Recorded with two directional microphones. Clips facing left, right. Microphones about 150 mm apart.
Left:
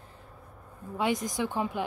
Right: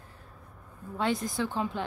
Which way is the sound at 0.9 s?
15° left (ahead or behind).